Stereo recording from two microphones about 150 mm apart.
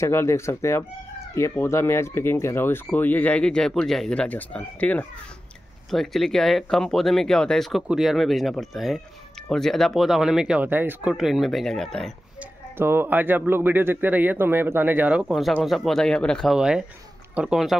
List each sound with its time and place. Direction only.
0.0 s speech: 15° left (ahead or behind); by 11.1 s 15° right (ahead or behind)
11.1 s speech: centre (ahead or behind)
12.7 s a man's voice: 15° right (ahead or behind)